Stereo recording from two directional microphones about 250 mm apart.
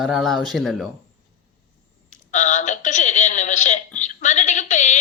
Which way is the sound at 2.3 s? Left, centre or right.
Left.